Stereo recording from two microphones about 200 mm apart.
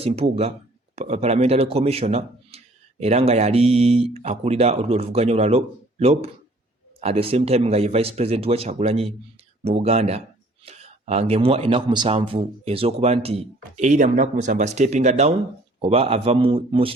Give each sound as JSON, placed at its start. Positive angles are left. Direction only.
{"t": 0.0, "sound": "a man's voice", "side_deg": -30}